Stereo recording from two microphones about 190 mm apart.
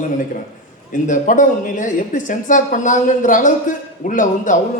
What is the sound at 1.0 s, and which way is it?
Speech, 40° left (ahead or behind).